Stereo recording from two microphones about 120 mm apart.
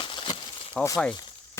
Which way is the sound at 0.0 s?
45° left (ahead or behind).